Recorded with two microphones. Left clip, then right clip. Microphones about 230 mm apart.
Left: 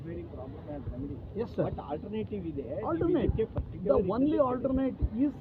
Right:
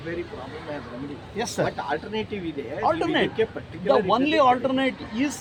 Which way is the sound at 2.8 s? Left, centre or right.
Right.